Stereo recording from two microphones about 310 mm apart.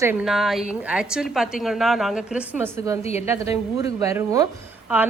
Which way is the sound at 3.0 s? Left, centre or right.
Left.